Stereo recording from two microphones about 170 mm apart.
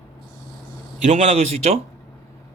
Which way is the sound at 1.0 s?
40° right (ahead or behind).